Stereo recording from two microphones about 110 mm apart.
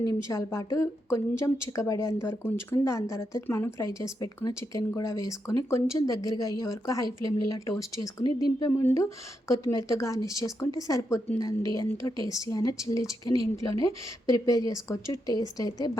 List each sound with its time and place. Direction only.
0.0 s speech: 30° left (ahead or behind)
8.8 s speech: 25° left (ahead or behind)